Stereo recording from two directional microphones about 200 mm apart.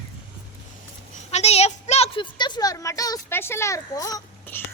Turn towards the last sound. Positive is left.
turn(degrees=15)  # may be behind; listen again after turning